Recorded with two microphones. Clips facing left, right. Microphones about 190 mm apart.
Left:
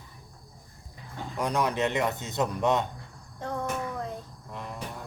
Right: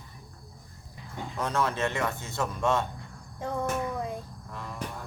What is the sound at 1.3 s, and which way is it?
A man's voice, 15° left (ahead or behind).